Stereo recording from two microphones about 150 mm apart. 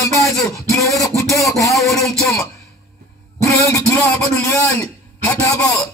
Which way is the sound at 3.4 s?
20° left (ahead or behind).